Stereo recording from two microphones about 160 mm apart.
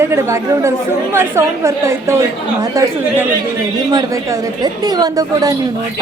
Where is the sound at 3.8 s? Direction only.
20° right (ahead or behind).